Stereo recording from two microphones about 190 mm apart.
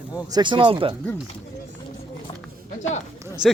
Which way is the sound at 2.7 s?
40° left (ahead or behind).